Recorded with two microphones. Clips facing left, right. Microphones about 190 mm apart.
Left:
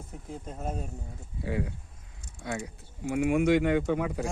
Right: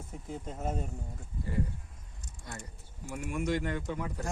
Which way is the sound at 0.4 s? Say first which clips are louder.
Even; centre (ahead or behind).